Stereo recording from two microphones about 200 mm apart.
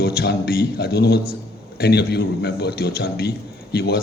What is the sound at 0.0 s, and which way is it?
Speech, 50° left (ahead or behind).